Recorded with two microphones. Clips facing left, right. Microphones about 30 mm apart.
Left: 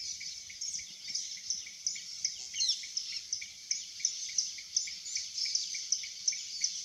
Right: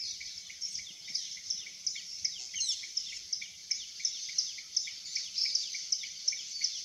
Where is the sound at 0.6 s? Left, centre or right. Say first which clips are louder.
Right 1 dB; right.